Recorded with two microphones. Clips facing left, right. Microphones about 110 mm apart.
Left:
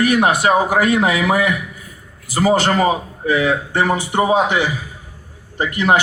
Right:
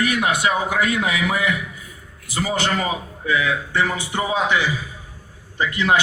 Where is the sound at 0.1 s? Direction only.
40° left (ahead or behind).